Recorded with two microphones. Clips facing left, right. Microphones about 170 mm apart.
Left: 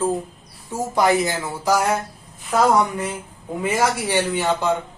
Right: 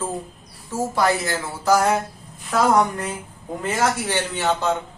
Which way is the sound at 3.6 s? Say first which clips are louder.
Left 2 dB; 10° left (ahead or behind).